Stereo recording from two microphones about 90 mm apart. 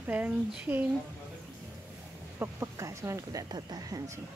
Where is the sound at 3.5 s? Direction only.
45° right (ahead or behind).